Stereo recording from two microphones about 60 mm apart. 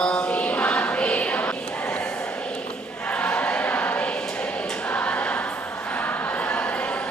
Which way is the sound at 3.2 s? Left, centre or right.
Centre.